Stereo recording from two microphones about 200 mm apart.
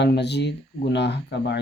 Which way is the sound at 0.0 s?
60° left (ahead or behind).